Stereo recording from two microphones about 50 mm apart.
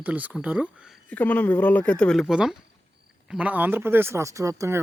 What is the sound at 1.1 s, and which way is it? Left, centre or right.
Speech, left.